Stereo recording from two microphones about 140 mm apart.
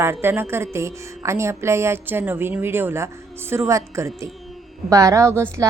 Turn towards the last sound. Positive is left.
turn(degrees=-20)  # may be behind; listen again after turning